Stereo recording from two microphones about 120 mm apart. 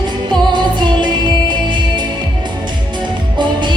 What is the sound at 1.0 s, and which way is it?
Music, 40° right (ahead or behind).